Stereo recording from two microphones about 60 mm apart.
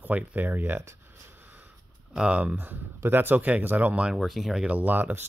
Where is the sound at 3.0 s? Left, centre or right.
Right.